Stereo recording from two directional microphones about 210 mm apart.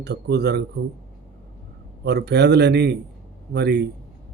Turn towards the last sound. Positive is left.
turn(degrees=-50)  # may be behind; listen again after turning